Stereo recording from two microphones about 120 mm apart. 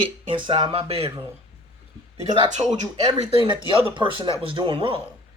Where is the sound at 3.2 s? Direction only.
45° right (ahead or behind).